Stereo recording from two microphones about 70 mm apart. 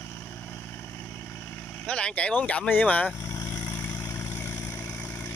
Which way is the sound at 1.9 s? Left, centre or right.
Centre.